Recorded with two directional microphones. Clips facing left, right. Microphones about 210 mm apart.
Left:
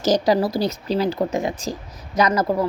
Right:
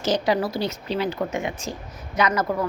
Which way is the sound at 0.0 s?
40° left (ahead or behind).